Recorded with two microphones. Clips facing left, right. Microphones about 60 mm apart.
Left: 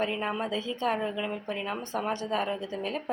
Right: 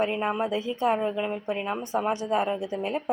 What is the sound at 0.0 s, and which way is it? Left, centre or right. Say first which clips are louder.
Speech: right 4 dB; centre.